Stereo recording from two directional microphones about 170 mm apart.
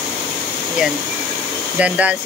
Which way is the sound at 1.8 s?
10° right (ahead or behind).